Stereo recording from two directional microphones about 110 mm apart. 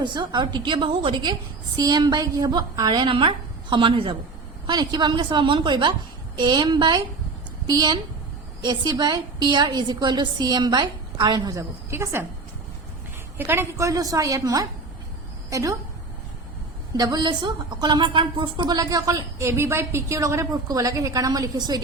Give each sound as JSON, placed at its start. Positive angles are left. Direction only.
{"t": 0.0, "sound": "a woman's voice", "side_deg": -40}
{"t": 1.2, "sound": "a woman's voice", "side_deg": -40}
{"t": 4.6, "sound": "a woman's voice", "side_deg": -40}
{"t": 11.9, "sound": "a woman's voice", "side_deg": -25}
{"t": 13.3, "sound": "a woman's voice", "side_deg": -20}
{"t": 17.0, "sound": "a woman's voice", "side_deg": -40}